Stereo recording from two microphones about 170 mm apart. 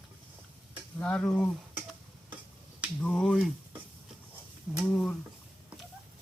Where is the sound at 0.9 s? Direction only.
5° left (ahead or behind).